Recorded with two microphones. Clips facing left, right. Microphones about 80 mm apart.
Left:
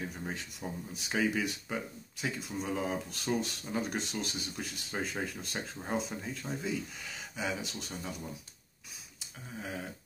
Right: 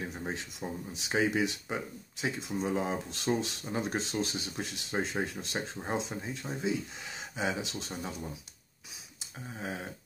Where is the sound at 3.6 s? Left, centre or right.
Centre.